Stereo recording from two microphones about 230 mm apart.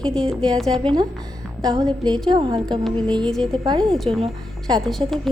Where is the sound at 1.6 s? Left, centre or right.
Centre.